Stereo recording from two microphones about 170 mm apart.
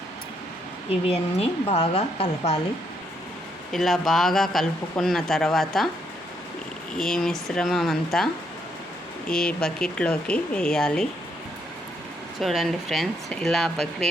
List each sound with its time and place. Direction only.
0.9 s speech: 35° left (ahead or behind)
3.7 s speech: centre (ahead or behind)
6.9 s speech: centre (ahead or behind)
9.3 s speech: 5° left (ahead or behind)
12.4 s speech: centre (ahead or behind)